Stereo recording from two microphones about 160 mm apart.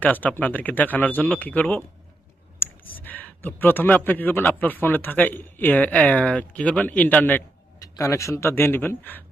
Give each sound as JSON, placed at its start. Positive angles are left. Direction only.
{"t": 0.0, "sound": "speech", "side_deg": 10}